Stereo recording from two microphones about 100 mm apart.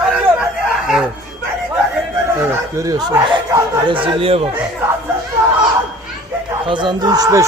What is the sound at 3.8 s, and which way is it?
Speech, 55° right (ahead or behind).